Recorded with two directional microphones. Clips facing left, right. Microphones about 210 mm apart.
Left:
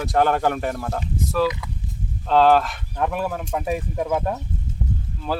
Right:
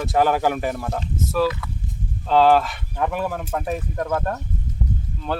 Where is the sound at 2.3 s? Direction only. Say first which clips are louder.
Even; centre (ahead or behind).